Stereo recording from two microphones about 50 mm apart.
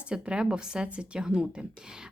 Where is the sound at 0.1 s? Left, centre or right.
Centre.